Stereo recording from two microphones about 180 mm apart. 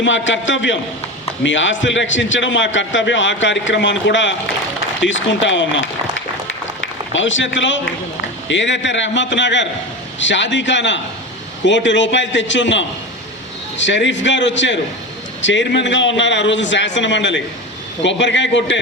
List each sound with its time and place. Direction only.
0.0 s a man's voice: 90° left